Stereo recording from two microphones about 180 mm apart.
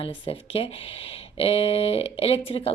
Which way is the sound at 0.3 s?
30° left (ahead or behind).